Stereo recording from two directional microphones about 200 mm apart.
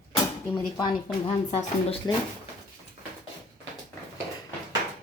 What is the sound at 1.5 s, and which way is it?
Speech, 30° left (ahead or behind).